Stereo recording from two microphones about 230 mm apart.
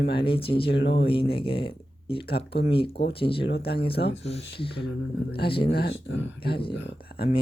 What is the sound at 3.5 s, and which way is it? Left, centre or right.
Speech, left.